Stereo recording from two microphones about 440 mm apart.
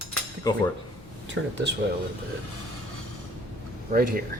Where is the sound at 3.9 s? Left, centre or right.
Centre.